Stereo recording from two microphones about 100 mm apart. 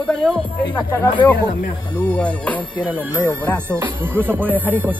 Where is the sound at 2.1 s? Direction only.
15° left (ahead or behind).